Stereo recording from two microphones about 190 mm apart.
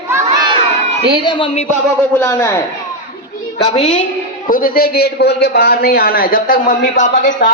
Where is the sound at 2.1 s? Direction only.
15° left (ahead or behind).